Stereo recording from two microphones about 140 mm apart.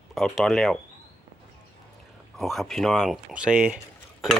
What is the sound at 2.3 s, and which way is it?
Speech, centre (ahead or behind).